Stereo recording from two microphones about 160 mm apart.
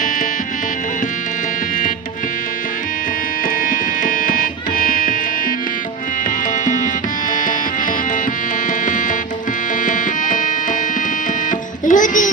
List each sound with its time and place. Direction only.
3.7 s music: 55° left (ahead or behind)
9.8 s music: 55° left (ahead or behind)
11.9 s music: 55° left (ahead or behind)